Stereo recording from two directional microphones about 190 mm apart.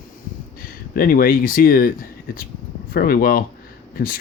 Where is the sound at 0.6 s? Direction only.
50° left (ahead or behind).